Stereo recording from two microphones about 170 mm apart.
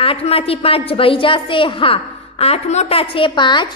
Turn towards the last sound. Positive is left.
turn(degrees=25)  # may be behind; listen again after turning